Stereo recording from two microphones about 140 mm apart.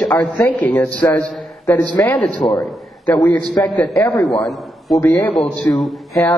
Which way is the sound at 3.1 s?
10° left (ahead or behind).